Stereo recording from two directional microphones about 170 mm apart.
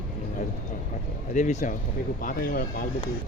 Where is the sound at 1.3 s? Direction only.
45° left (ahead or behind).